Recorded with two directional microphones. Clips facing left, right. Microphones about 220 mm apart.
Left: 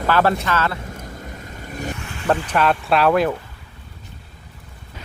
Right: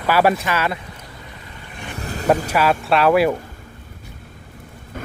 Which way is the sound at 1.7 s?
40° left (ahead or behind).